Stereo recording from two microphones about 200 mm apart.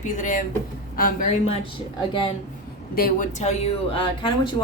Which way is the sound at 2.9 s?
45° left (ahead or behind).